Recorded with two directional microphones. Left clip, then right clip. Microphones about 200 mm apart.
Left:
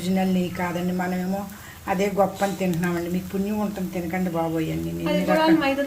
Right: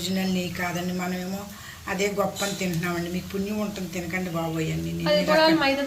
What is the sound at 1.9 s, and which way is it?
A woman's voice, 35° left (ahead or behind).